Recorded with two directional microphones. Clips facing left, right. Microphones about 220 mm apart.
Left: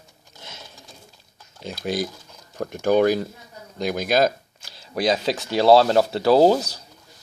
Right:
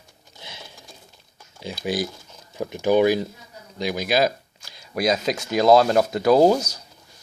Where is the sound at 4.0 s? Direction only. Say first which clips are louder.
Left 1 dB; 45° left (ahead or behind).